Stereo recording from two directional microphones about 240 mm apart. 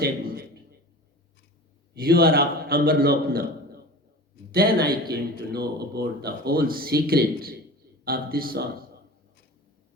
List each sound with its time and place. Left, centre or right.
1.9 s speech: right
4.5 s speech: right